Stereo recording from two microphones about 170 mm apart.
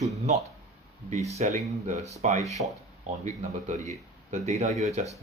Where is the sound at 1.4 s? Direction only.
45° right (ahead or behind).